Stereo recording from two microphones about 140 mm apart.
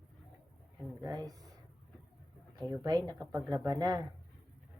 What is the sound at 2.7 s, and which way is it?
Speech, 30° right (ahead or behind).